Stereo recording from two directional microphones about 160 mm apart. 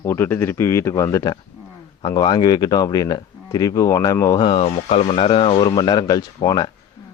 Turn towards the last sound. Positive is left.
turn(degrees=25)  # may be behind; listen again after turning